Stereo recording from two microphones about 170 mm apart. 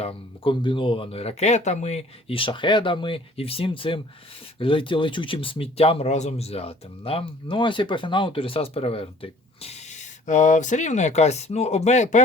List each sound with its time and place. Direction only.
0.0 s speech: 35° left (ahead or behind)